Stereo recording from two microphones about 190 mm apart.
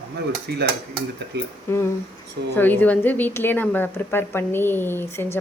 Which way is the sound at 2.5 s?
10° left (ahead or behind).